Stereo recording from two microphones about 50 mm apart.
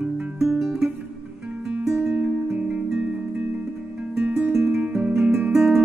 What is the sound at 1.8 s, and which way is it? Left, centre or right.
Music, centre.